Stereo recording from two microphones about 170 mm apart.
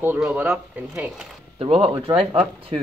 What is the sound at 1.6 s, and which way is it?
Speech, 35° right (ahead or behind).